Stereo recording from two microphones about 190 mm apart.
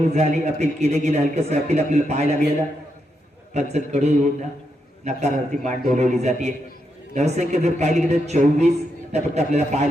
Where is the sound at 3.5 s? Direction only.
35° right (ahead or behind).